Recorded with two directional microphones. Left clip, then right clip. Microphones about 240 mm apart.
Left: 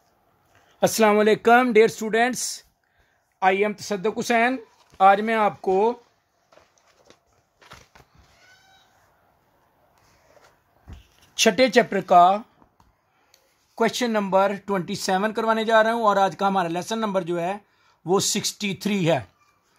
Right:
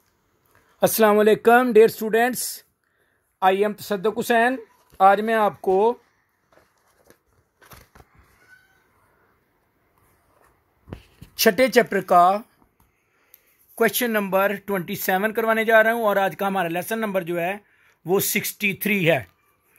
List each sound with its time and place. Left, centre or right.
0.7 s speech: centre
11.3 s speech: centre
13.8 s speech: centre